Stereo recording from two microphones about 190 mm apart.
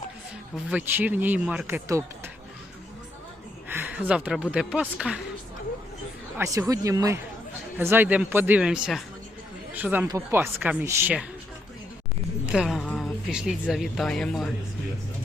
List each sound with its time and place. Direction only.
0.7 s speech: 10° right (ahead or behind)
3.7 s a sound: 10° right (ahead or behind)
4.5 s speech: 5° right (ahead or behind)
6.3 s speech: 15° right (ahead or behind)
12.5 s speech: 5° right (ahead or behind)